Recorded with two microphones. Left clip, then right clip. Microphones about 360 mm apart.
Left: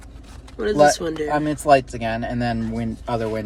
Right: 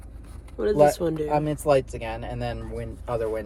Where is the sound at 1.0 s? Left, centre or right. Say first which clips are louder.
Left 1 dB; centre.